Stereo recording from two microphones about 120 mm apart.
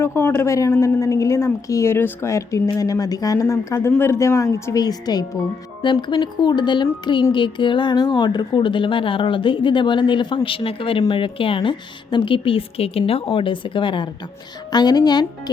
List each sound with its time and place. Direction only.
0.0 s a woman's voice: 20° left (ahead or behind)